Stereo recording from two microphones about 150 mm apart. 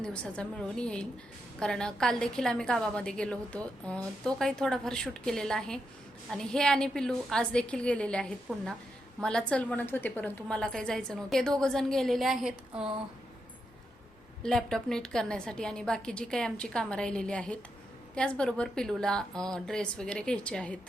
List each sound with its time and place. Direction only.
0.0 s a woman's voice: 5° left (ahead or behind)
14.4 s a woman's voice: 5° left (ahead or behind)